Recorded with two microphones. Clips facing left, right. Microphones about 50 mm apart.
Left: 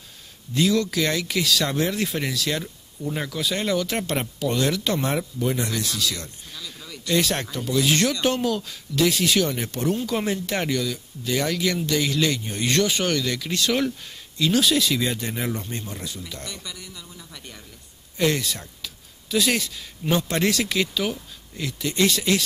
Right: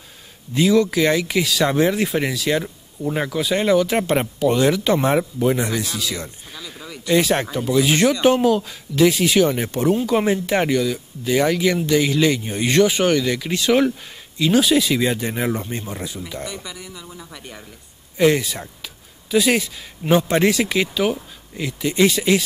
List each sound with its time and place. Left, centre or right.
0.6 s speech: centre